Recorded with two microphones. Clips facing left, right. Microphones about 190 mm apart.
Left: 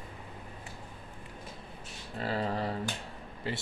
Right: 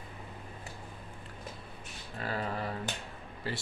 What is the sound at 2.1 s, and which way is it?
Speech, 30° left (ahead or behind).